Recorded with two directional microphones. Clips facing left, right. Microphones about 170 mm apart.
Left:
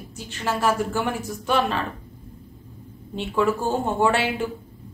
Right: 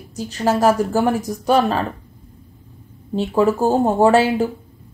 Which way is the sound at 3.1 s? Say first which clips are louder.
Right 6 dB; 40° right (ahead or behind).